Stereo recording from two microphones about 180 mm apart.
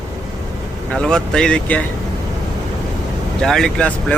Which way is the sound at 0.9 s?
5° left (ahead or behind).